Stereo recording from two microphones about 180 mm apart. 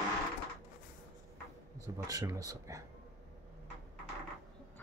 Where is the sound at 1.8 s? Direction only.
20° right (ahead or behind).